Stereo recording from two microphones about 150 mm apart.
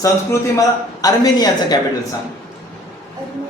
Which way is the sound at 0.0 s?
20° left (ahead or behind).